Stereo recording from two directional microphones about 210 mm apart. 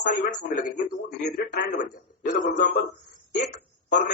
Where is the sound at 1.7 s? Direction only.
40° left (ahead or behind).